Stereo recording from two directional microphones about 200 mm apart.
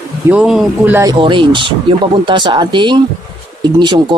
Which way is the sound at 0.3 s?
5° right (ahead or behind).